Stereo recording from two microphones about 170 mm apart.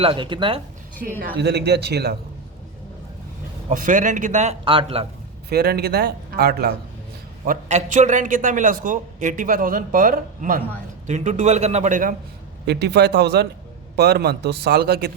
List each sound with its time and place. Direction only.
0.0 s speech: 30° right (ahead or behind)
1.2 s speech: 75° right (ahead or behind)
3.7 s a man's voice: 50° right (ahead or behind)
4.6 s speech: 30° right (ahead or behind)
5.5 s speech: 65° right (ahead or behind)
7.4 s a man's voice: 50° right (ahead or behind)
11.0 s a man's voice: 45° right (ahead or behind)
12.6 s speech: 75° right (ahead or behind)